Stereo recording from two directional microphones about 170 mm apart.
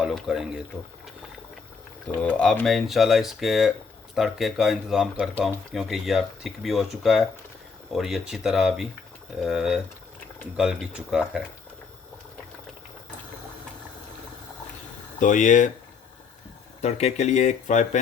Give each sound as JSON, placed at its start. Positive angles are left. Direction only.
{"t": 0.0, "sound": "speech", "side_deg": 0}
{"t": 2.2, "sound": "speech", "side_deg": 5}
{"t": 15.2, "sound": "speech", "side_deg": 45}
{"t": 16.8, "sound": "speech", "side_deg": 40}